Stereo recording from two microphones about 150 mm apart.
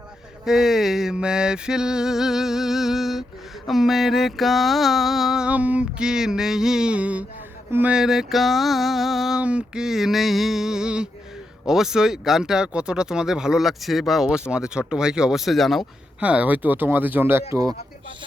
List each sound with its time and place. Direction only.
0.4 s speech: centre (ahead or behind); by 17.7 s 25° right (ahead or behind)